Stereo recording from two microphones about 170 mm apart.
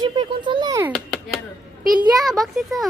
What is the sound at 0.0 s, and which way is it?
Speech, 25° right (ahead or behind).